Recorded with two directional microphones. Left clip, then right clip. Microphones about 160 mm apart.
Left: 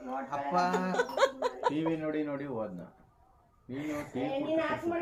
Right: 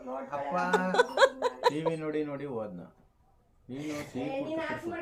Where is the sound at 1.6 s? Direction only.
50° right (ahead or behind).